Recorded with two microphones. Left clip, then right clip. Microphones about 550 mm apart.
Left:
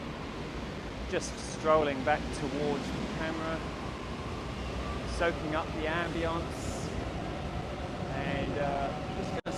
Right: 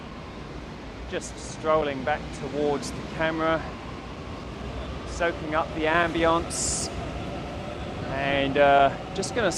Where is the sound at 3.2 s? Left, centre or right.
Centre.